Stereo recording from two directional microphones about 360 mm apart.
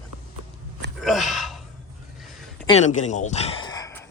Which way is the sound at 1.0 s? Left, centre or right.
Centre.